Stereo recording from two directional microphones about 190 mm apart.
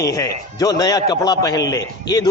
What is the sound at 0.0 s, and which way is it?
A man's voice, 20° left (ahead or behind).